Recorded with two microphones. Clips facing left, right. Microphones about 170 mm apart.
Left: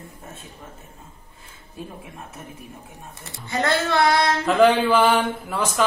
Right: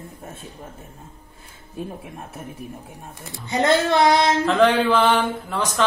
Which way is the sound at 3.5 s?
20° right (ahead or behind).